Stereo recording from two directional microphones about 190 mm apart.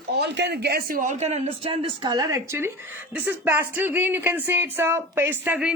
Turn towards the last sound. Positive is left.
turn(degrees=-10)  # may be behind; listen again after turning